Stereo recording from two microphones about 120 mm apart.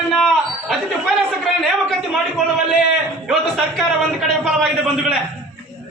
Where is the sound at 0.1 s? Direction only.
Centre (ahead or behind).